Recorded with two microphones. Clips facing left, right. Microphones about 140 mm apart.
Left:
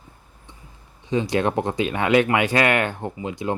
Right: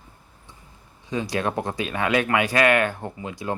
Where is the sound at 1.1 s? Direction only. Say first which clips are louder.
Left 4 dB; 25° left (ahead or behind).